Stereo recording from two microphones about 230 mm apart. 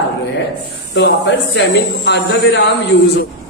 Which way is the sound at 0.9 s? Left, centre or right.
Left.